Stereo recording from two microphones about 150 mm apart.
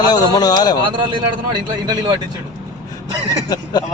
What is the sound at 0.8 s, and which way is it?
Speech, 30° right (ahead or behind).